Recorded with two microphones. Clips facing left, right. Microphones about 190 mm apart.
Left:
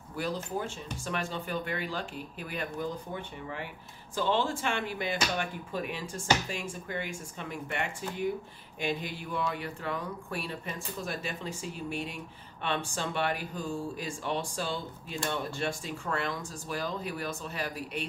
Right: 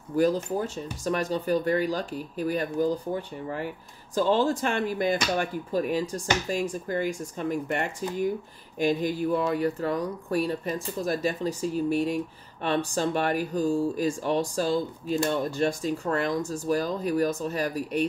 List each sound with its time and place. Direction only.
0.1 s speech: 40° right (ahead or behind)